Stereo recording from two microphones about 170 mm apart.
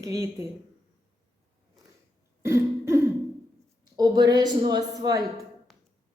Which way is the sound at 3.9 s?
25° right (ahead or behind).